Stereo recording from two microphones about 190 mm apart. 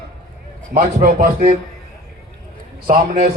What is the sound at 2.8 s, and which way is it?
Speech, 50° right (ahead or behind).